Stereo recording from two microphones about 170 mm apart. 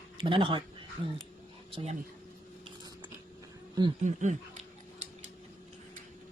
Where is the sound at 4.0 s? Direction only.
45° right (ahead or behind).